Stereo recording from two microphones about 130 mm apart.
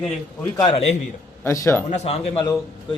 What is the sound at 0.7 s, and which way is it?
Speech, 55° left (ahead or behind).